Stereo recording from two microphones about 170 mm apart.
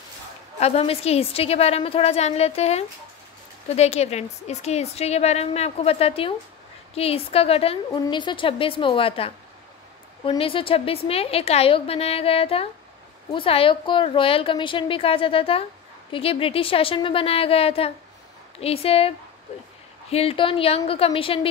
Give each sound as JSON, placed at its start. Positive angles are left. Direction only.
{"t": 0.6, "sound": "a woman's voice", "side_deg": 35}